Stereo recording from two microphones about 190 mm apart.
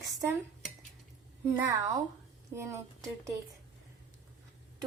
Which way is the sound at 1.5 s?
15° right (ahead or behind).